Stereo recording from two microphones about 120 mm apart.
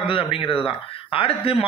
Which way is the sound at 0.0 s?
45° left (ahead or behind).